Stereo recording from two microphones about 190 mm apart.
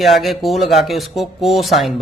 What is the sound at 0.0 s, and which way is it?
Speech, centre (ahead or behind).